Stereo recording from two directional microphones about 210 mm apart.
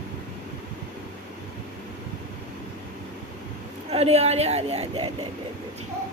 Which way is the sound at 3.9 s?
30° right (ahead or behind).